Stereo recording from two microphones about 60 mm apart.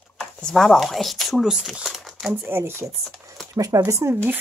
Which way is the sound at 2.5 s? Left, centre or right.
Right.